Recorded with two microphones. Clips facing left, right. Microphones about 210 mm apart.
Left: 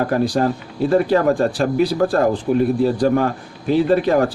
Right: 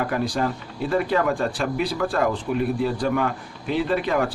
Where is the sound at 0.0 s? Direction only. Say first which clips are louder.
Left 6 dB; 40° left (ahead or behind).